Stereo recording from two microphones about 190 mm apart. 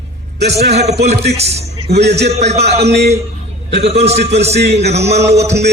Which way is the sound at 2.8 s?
60° right (ahead or behind).